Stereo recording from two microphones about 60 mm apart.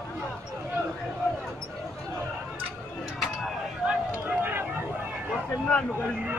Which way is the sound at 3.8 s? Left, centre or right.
Centre.